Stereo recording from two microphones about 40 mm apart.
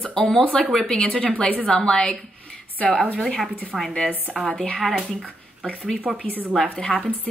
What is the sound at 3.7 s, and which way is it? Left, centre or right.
Speech, centre.